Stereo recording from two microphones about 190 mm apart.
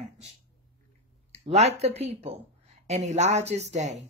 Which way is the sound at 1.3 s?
35° right (ahead or behind).